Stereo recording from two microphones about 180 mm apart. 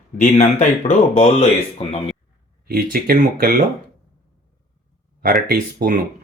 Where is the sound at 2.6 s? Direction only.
55° right (ahead or behind).